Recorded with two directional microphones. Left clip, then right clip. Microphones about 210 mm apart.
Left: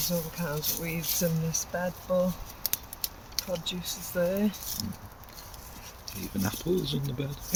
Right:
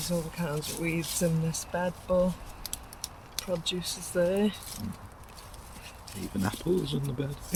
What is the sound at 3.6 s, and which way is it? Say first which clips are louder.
Speech: right 2 dB; 40° right (ahead or behind).